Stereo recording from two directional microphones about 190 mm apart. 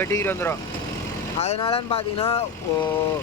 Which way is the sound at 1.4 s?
30° left (ahead or behind).